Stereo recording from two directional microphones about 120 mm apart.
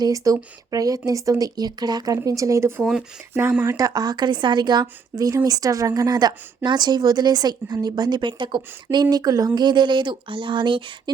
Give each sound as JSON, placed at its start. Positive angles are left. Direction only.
{"t": 0.0, "sound": "a woman's voice", "side_deg": -30}
{"t": 3.8, "sound": "a woman's voice", "side_deg": -30}